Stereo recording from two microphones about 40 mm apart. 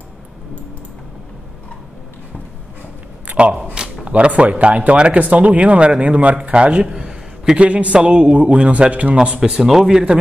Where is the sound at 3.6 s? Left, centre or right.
Right.